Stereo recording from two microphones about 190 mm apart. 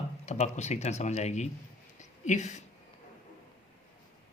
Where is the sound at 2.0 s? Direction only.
40° left (ahead or behind).